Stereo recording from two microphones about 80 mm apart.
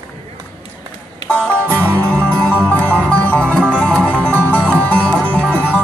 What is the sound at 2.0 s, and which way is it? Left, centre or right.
Music, centre.